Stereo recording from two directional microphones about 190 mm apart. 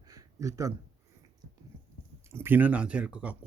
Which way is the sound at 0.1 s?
15° right (ahead or behind).